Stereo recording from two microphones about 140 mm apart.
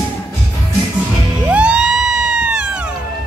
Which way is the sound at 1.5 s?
10° right (ahead or behind).